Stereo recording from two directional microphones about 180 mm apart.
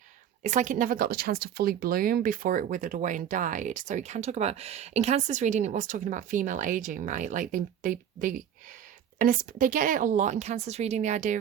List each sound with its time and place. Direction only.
0.4 s speech: 45° right (ahead or behind)